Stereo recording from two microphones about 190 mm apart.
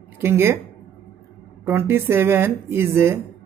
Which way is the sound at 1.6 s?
10° right (ahead or behind).